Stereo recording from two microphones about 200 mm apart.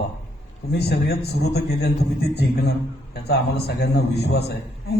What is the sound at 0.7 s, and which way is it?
A man's voice, 55° left (ahead or behind).